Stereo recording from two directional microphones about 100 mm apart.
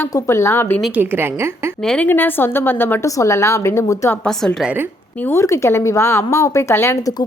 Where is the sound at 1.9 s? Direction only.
15° left (ahead or behind).